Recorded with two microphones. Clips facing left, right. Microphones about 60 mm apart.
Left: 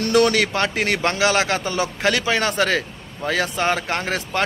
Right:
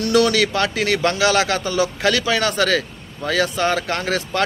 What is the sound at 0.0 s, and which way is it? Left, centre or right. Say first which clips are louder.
A man's voice: right 1 dB; left.